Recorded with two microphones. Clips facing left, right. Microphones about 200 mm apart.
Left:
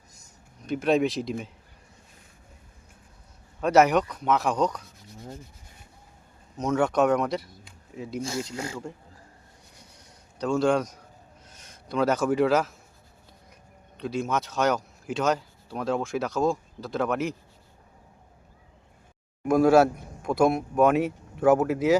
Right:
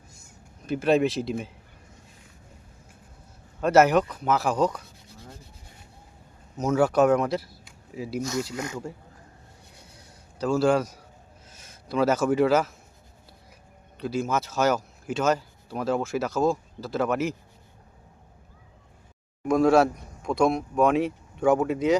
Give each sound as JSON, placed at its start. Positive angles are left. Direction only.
{"t": 0.6, "sound": "speech", "side_deg": -5}
{"t": 3.6, "sound": "speech", "side_deg": 0}
{"t": 6.6, "sound": "speech", "side_deg": -5}
{"t": 8.2, "sound": "speech", "side_deg": 30}
{"t": 9.9, "sound": "a sound", "side_deg": -5}
{"t": 11.4, "sound": "a man's voice", "side_deg": -5}
{"t": 14.0, "sound": "speech", "side_deg": -5}
{"t": 19.5, "sound": "speech", "side_deg": 5}